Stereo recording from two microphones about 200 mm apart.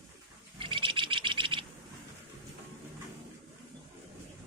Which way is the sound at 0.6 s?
25° right (ahead or behind).